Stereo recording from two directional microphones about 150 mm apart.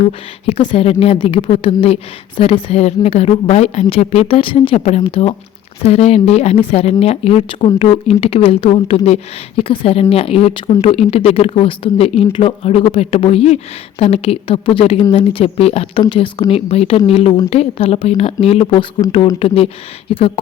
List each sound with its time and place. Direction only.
0.0 s a woman's voice: 45° left (ahead or behind)